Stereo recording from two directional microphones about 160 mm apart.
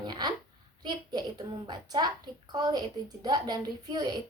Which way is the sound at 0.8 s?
25° right (ahead or behind).